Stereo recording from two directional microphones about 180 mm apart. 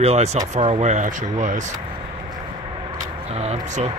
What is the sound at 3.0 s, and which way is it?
Vehicle, 35° right (ahead or behind).